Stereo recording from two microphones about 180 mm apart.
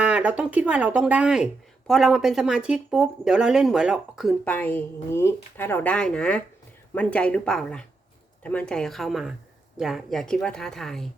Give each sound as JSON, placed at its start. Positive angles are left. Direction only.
{"t": 0.0, "sound": "speech", "side_deg": -5}
{"t": 4.4, "sound": "a woman's voice", "side_deg": 10}